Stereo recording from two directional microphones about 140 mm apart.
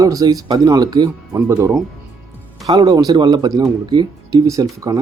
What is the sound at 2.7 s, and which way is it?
Speech, 30° right (ahead or behind).